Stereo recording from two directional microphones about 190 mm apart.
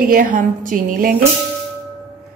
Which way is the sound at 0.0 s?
45° right (ahead or behind).